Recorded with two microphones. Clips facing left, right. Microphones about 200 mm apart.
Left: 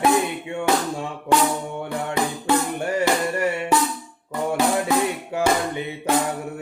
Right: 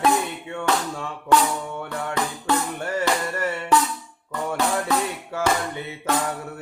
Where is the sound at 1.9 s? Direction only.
15° left (ahead or behind).